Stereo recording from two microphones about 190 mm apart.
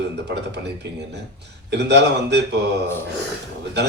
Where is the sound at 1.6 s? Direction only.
60° right (ahead or behind).